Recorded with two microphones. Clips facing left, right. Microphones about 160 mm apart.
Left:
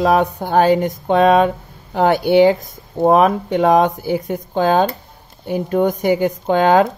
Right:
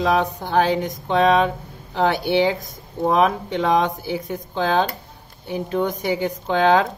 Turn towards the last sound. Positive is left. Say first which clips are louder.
# left 4 dB
turn(degrees=45)  # may be behind; listen again after turning